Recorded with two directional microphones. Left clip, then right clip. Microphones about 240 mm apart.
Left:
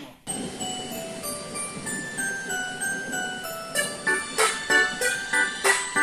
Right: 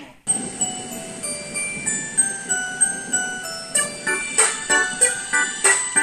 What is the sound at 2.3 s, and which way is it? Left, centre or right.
Music, right.